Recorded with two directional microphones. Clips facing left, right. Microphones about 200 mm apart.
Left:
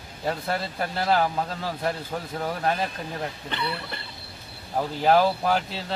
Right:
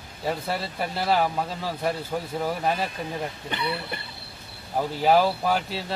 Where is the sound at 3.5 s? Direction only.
15° right (ahead or behind).